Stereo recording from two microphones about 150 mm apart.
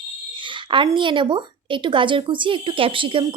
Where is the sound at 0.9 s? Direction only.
35° right (ahead or behind).